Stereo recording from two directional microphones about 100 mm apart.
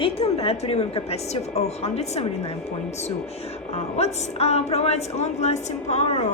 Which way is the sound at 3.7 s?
90° left.